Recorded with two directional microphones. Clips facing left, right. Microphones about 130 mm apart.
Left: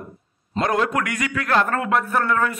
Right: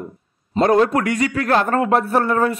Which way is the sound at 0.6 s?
30° right (ahead or behind).